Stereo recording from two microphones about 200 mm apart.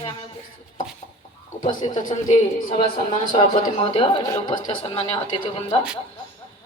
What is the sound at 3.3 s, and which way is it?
A man's voice, 30° left (ahead or behind).